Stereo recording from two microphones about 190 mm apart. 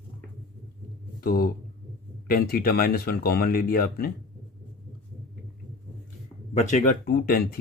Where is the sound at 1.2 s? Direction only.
50° left (ahead or behind).